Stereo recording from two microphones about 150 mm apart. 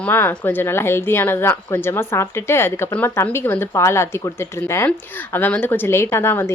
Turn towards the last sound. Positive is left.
turn(degrees=15)  # may be behind; listen again after turning